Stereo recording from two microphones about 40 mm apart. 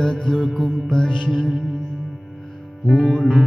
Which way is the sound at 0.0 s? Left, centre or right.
Centre.